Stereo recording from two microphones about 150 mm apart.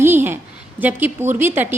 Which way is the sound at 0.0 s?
15° right (ahead or behind).